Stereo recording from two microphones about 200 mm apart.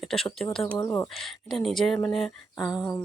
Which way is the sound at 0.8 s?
15° left (ahead or behind).